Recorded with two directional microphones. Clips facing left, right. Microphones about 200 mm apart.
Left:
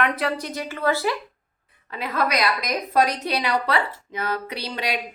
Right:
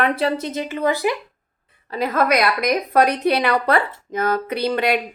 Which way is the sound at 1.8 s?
40° right (ahead or behind).